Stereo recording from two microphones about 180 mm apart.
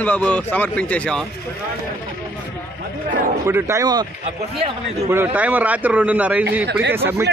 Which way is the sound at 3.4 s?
15° right (ahead or behind).